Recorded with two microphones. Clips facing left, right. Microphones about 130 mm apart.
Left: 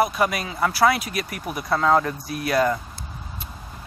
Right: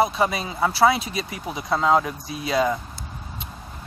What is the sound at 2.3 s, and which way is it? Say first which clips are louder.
Speech: left 1 dB; 20° right (ahead or behind).